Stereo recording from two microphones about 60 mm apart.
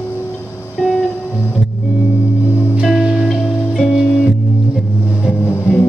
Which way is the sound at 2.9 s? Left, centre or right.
Centre.